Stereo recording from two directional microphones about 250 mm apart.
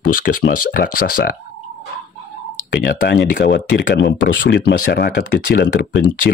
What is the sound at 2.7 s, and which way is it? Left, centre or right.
Speech, left.